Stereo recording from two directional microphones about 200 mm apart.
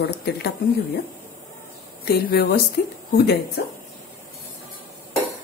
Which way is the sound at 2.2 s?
50° left (ahead or behind).